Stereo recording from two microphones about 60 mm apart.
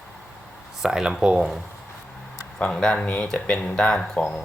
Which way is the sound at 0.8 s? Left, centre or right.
Centre.